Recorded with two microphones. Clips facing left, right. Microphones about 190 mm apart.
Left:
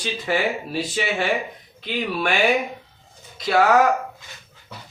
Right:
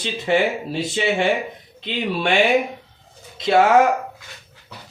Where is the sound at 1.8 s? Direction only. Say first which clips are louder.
Right 2 dB; 25° right (ahead or behind).